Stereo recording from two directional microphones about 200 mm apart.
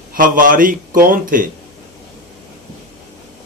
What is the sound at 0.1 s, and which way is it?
Speech, 45° right (ahead or behind).